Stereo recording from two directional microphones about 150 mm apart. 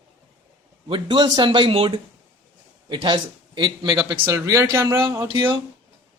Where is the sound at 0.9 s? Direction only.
30° right (ahead or behind).